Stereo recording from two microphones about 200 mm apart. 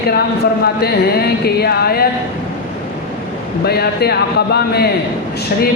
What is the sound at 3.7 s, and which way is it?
Speech, 50° left (ahead or behind).